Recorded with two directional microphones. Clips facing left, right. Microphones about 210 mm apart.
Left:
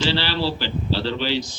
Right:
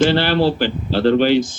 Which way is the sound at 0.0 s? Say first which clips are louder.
Right 8 dB; 50° right (ahead or behind).